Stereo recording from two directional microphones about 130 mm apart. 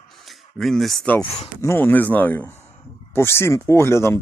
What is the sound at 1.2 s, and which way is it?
Speech, 50° left (ahead or behind).